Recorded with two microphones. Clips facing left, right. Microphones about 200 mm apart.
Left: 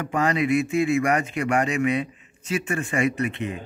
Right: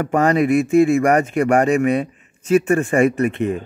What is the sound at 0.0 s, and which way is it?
Speech, 50° right (ahead or behind).